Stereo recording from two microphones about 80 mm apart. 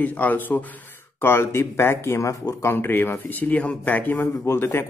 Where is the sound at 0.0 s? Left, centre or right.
Left.